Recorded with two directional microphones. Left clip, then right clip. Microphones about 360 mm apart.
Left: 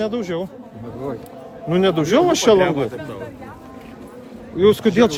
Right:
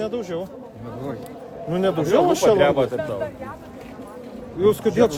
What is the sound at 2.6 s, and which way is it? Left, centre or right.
Speech, centre.